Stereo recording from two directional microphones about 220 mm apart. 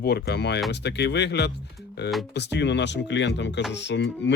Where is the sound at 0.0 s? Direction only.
45° left (ahead or behind).